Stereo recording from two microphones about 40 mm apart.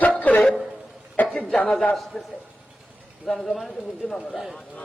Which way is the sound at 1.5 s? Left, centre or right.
Left.